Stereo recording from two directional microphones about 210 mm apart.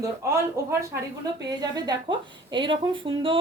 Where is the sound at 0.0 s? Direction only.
15° right (ahead or behind).